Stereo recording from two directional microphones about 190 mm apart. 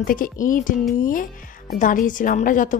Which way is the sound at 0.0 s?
45° left (ahead or behind).